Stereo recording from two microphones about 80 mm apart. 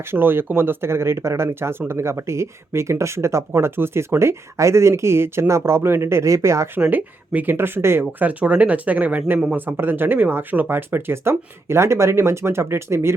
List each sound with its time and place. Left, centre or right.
0.0 s speech: right
6.9 s speech: right
8.2 s speech: centre